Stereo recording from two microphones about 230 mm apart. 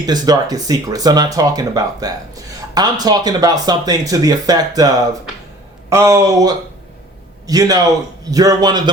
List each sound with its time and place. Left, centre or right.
0.0 s a man's voice: centre